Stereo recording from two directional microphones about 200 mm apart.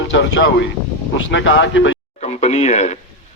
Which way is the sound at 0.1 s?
60° left (ahead or behind).